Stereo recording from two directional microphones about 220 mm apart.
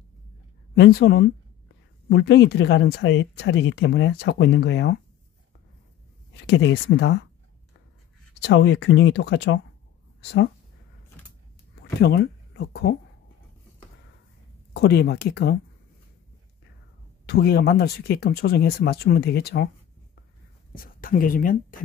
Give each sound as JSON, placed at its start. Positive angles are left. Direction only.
{"t": 0.7, "sound": "speech", "side_deg": 45}
{"t": 6.4, "sound": "speech", "side_deg": 50}
{"t": 8.4, "sound": "speech", "side_deg": 55}
{"t": 11.7, "sound": "speech", "side_deg": 45}
{"t": 14.7, "sound": "speech", "side_deg": 45}
{"t": 17.3, "sound": "speech", "side_deg": 45}
{"t": 20.7, "sound": "speech", "side_deg": 40}